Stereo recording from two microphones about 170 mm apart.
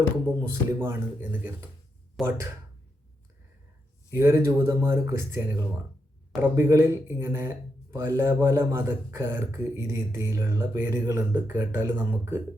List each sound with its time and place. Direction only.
0.3 s speech: 15° right (ahead or behind)
2.2 s speech: centre (ahead or behind)
4.1 s speech: 15° right (ahead or behind)